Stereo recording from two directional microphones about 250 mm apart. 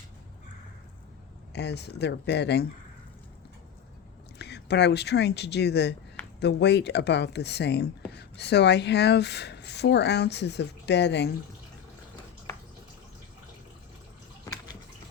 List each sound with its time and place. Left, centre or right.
1.5 s speech: left
4.4 s speech: left